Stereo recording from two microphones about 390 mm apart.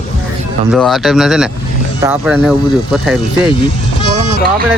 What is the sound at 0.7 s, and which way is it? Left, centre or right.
Speech, centre.